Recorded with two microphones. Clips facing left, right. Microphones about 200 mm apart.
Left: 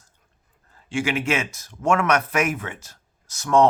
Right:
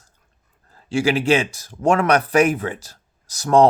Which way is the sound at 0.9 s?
35° right (ahead or behind).